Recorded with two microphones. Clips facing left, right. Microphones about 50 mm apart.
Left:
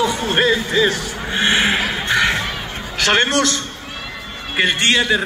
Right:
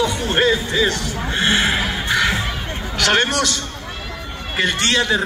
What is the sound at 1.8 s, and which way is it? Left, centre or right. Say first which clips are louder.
Music: left 1 dB; centre.